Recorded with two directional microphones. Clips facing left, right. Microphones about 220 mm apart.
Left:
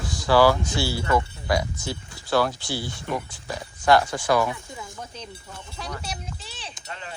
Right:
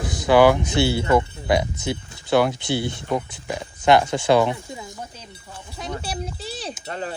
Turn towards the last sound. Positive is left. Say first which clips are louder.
# right 9 dB
turn(degrees=-40)  # may be behind; listen again after turning